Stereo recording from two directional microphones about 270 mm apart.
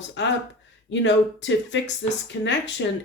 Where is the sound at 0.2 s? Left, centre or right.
Left.